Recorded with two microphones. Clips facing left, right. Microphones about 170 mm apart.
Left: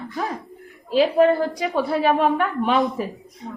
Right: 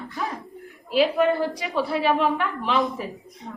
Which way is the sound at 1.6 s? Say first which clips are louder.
Left 3 dB; 50° left (ahead or behind).